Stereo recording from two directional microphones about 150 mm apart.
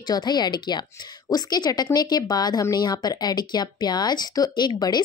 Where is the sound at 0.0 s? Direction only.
30° left (ahead or behind).